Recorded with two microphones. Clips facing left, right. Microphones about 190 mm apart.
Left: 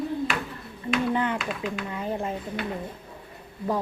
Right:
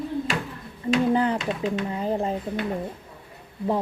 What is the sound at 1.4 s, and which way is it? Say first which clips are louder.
Speech: right 5 dB; 25° right (ahead or behind).